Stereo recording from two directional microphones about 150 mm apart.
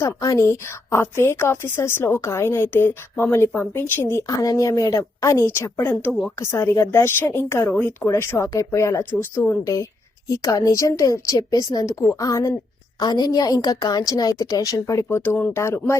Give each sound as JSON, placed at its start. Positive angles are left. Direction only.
{"t": 0.0, "sound": "a woman's voice", "side_deg": 20}
{"t": 6.1, "sound": "speech", "side_deg": 0}
{"t": 6.4, "sound": "a woman's voice", "side_deg": 20}